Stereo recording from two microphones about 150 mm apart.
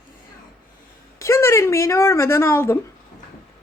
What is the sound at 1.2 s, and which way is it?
Speech, 20° left (ahead or behind).